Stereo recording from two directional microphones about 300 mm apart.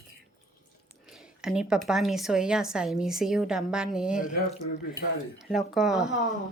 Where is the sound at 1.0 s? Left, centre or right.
Centre.